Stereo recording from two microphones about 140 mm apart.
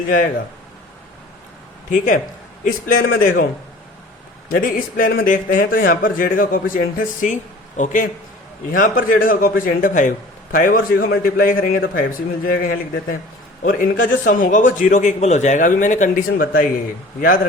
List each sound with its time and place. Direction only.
2.6 s a man's voice: 90° left
4.4 s a man's voice: 90° left; by 8.1 s 70° left (ahead or behind)
8.7 s a man's voice: 80° left
13.6 s a man's voice: 80° left
17.2 s a man's voice: 80° left